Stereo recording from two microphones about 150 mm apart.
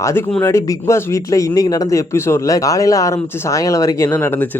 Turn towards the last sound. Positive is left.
turn(degrees=15)  # may be behind; listen again after turning